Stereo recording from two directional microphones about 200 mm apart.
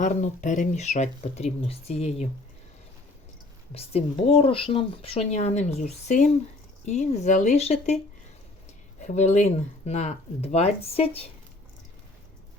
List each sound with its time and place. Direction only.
0.0 s speech: 40° left (ahead or behind)
3.8 s speech: 30° left (ahead or behind)
9.0 s speech: 35° left (ahead or behind)